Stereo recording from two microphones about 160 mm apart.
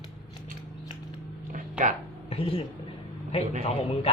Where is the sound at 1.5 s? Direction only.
55° right (ahead or behind).